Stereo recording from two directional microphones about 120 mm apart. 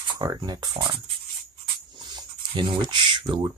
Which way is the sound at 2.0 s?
40° right (ahead or behind).